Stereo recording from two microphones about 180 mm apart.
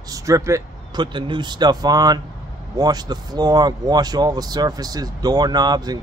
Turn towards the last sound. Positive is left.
turn(degrees=-20)  # may be behind; listen again after turning